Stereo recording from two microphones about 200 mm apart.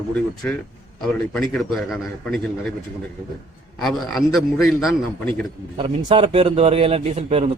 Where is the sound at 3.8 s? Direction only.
Centre (ahead or behind).